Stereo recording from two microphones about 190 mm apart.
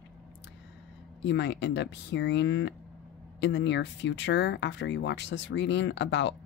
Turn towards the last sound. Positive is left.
turn(degrees=65)  # may be behind; listen again after turning